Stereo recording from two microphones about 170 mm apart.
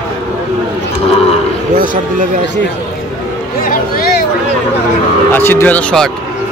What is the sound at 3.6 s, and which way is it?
Music, 60° left (ahead or behind).